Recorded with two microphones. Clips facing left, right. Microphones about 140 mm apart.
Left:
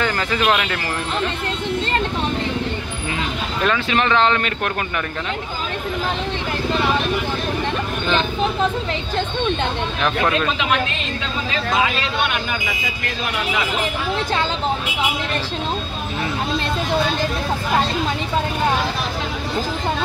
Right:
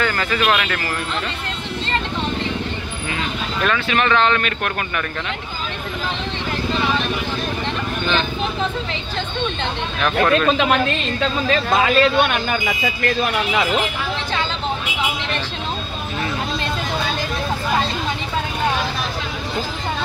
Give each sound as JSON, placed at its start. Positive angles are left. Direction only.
{"t": 0.0, "sound": "speech", "side_deg": 20}
{"t": 3.6, "sound": "speech", "side_deg": 25}
{"t": 11.7, "sound": "speech", "side_deg": -50}